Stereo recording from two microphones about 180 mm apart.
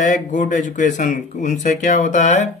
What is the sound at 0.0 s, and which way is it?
Speech, 45° left (ahead or behind).